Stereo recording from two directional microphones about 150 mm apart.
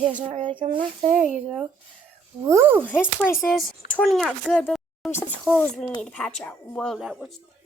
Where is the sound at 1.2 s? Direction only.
5° right (ahead or behind).